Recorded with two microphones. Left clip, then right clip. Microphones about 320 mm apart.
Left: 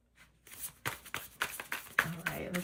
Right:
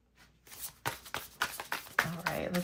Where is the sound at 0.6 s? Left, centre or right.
Centre.